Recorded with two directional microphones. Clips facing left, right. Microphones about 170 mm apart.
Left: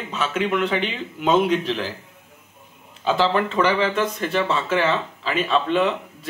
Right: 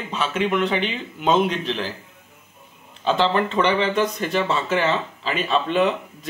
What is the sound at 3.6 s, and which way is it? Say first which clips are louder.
Speech: even; 25° right (ahead or behind).